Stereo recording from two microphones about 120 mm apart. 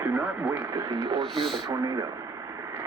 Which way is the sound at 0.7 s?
25° right (ahead or behind).